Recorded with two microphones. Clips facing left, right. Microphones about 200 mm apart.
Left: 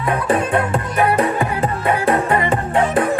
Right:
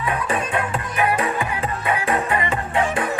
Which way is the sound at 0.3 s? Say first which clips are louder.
Left 6 dB; 40° left (ahead or behind).